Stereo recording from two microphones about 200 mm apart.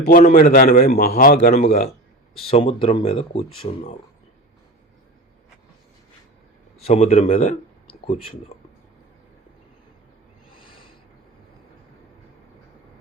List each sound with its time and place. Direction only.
0.1 s a man's voice: 45° left (ahead or behind)
2.5 s speech: 30° left (ahead or behind)
6.8 s speech: 35° left (ahead or behind)